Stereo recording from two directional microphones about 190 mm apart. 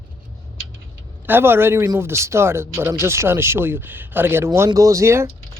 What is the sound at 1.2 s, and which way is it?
Speech, 10° right (ahead or behind).